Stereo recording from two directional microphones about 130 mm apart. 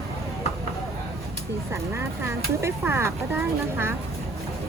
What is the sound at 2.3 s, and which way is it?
Speech, 20° right (ahead or behind).